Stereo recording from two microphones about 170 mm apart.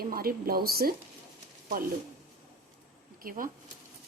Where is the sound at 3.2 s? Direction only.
55° right (ahead or behind).